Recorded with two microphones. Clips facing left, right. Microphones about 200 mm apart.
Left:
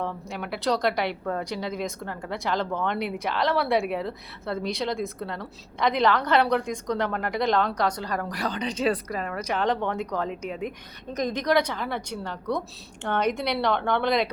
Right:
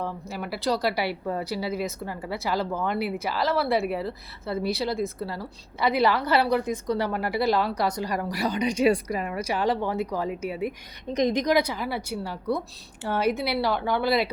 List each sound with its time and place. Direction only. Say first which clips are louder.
0.0 s a woman's voice: even; centre (ahead or behind)